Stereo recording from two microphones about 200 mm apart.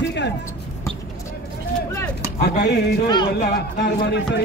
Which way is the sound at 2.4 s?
55° left (ahead or behind).